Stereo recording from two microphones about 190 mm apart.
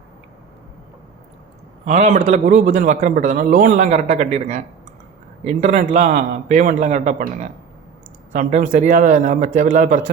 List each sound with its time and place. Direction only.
1.8 s a man's voice: 40° right (ahead or behind)
8.3 s a man's voice: 40° right (ahead or behind)